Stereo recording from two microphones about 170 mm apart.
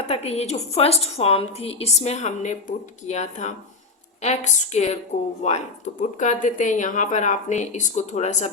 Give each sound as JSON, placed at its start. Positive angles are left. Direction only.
{"t": 0.1, "sound": "a woman's voice", "side_deg": 40}